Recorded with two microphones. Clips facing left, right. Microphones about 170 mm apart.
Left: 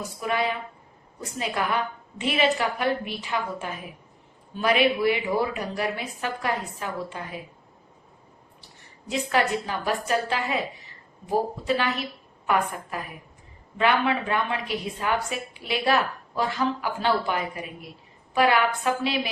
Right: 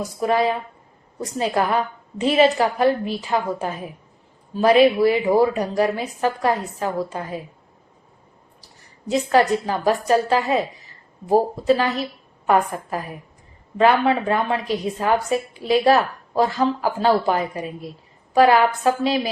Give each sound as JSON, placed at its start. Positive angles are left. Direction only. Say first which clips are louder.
{"t": 0.2, "sound": "a woman's voice", "louder": "right 7 dB", "side_deg": -35}
{"t": 8.6, "sound": "a woman's voice", "louder": "right 9 dB", "side_deg": -40}